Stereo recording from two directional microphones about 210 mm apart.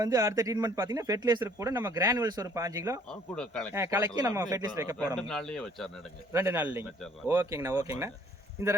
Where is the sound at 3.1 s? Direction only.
5° left (ahead or behind).